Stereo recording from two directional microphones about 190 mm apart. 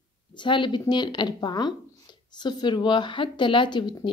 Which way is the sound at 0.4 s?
25° left (ahead or behind).